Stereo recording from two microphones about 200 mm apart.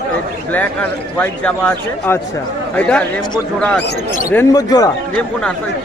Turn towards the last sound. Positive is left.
turn(degrees=20)  # may be behind; listen again after turning